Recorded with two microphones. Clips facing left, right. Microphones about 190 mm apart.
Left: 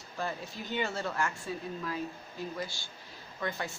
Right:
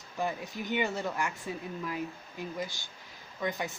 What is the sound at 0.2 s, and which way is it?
Speech, 15° right (ahead or behind).